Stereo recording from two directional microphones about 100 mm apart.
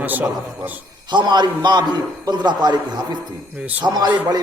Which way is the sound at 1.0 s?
50° right (ahead or behind).